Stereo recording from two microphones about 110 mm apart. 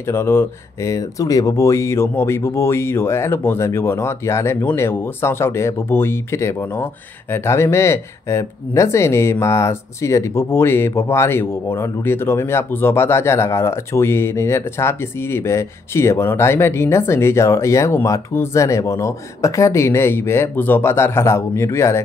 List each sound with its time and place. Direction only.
0.0 s speech: 20° left (ahead or behind)